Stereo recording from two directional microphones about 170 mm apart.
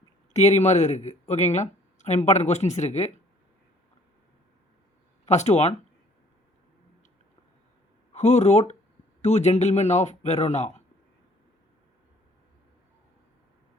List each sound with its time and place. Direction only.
0.3 s speech: 40° left (ahead or behind)
5.2 s speech: 40° left (ahead or behind)
8.1 s speech: 40° left (ahead or behind)